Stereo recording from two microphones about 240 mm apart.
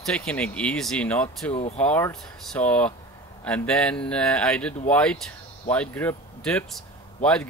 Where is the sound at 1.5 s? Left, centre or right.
Left.